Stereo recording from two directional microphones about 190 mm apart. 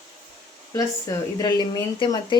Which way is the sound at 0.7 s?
20° left (ahead or behind).